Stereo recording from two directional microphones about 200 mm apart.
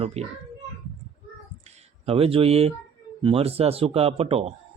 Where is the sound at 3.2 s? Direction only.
30° right (ahead or behind).